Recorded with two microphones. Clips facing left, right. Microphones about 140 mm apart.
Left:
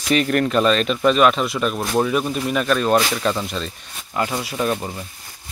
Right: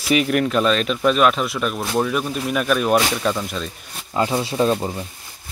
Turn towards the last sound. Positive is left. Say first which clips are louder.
# right 4 dB
turn(degrees=-20)  # may be behind; listen again after turning